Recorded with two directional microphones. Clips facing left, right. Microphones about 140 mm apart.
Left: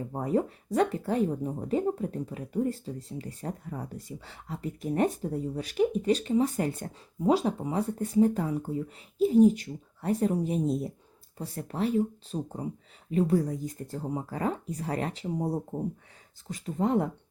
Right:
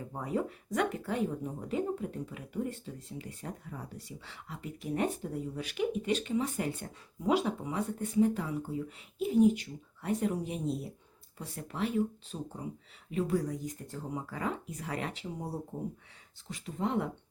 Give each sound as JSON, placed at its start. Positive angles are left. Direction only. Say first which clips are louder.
{"t": 0.1, "sound": "speech", "louder": "left 6 dB", "side_deg": 40}